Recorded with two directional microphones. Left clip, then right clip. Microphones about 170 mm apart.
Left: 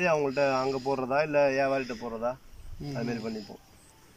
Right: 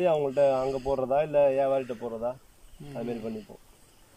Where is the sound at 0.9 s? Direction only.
25° right (ahead or behind).